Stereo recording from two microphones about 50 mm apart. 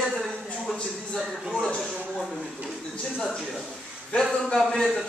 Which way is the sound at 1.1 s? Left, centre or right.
Centre.